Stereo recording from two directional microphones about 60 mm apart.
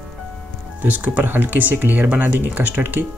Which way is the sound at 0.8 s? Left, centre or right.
Right.